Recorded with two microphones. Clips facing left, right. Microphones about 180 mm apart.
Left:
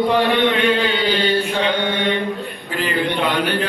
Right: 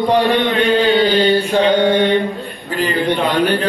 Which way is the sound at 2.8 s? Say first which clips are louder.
Right 4 dB; 40° right (ahead or behind).